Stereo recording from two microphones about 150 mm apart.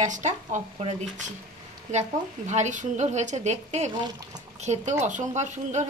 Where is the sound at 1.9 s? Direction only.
50° right (ahead or behind).